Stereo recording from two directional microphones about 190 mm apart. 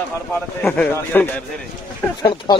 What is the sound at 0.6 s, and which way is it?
Speech, 10° left (ahead or behind).